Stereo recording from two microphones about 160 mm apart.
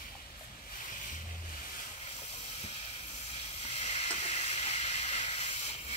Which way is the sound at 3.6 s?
45° left (ahead or behind).